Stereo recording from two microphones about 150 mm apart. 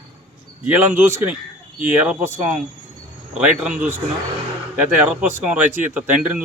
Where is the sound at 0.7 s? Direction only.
15° right (ahead or behind).